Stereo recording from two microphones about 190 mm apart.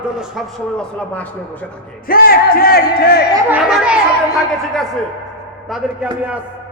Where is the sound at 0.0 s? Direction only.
Centre (ahead or behind).